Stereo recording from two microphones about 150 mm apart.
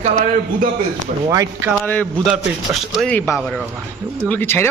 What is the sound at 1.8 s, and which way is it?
Speech, 10° left (ahead or behind).